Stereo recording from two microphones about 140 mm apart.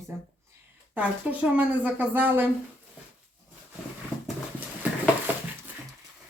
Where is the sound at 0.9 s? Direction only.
10° right (ahead or behind).